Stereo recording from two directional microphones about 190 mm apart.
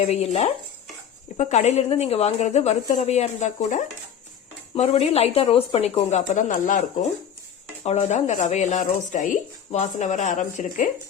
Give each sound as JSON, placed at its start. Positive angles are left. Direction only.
{"t": 0.0, "sound": "speech", "side_deg": 35}
{"t": 7.9, "sound": "speech", "side_deg": 35}